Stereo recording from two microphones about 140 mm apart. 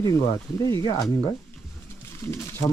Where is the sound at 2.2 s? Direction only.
20° left (ahead or behind).